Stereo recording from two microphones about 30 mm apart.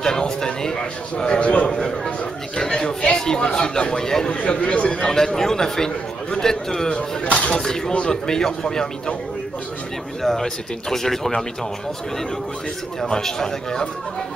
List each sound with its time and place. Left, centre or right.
0.0 s a man's voice: left
1.4 s speech: left
2.5 s a man's voice: left
4.4 s speech: left
5.1 s speech: centre
6.9 s speech: left
7.3 s a man's voice: left
7.6 s a man's voice: centre
10.2 s speech: centre
13.1 s a man's voice: centre